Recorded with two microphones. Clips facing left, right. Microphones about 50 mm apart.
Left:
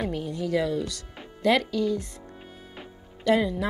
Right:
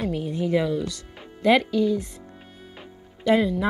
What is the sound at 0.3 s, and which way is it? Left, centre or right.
Speech, right.